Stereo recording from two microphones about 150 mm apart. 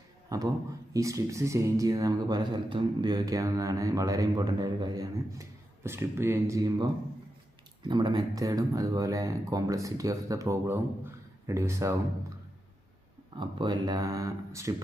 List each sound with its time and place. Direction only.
0.3 s a man's voice: 25° right (ahead or behind)
13.3 s speech: 30° right (ahead or behind)